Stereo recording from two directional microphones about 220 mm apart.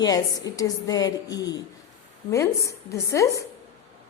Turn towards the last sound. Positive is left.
turn(degrees=15)  # may be behind; listen again after turning